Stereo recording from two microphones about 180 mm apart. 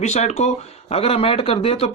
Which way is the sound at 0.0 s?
40° left (ahead or behind).